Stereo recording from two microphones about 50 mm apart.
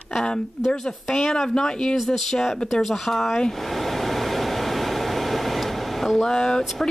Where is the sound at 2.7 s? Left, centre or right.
Centre.